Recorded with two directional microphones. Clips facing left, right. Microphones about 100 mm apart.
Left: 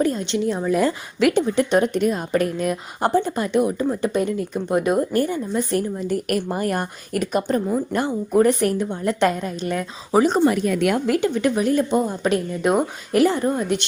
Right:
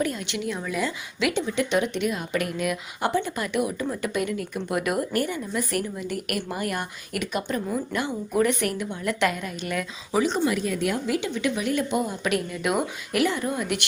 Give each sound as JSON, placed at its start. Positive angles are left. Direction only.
{"t": 0.0, "sound": "speech", "side_deg": 35}
{"t": 0.8, "sound": "speech", "side_deg": 45}